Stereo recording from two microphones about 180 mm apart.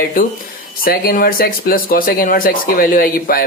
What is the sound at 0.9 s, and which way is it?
A man's voice, 55° left (ahead or behind).